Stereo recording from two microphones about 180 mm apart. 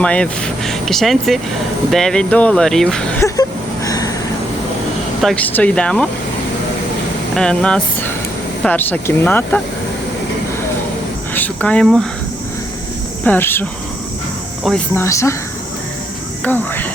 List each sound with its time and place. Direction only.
0.0 s speech: 5° left (ahead or behind)
3.8 s a sound: 20° left (ahead or behind)
5.2 s speech: 5° left (ahead or behind)
7.3 s speech: 5° left (ahead or behind)
11.3 s speech: 10° left (ahead or behind)
13.2 s speech: 10° left (ahead or behind)
14.9 s speech: 15° left (ahead or behind)
16.4 s speech: 10° left (ahead or behind)